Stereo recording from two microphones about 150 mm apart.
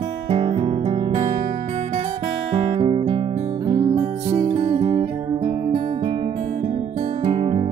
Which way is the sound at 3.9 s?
40° right (ahead or behind).